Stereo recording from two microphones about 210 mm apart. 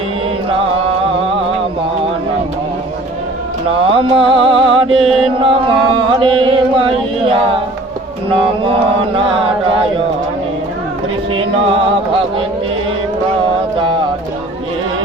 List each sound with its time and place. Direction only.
3.8 s chant: 25° right (ahead or behind)